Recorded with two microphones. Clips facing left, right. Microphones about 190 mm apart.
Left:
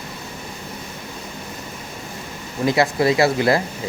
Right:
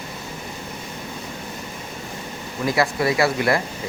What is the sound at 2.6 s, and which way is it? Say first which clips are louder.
Speech: left 3 dB; 25° left (ahead or behind).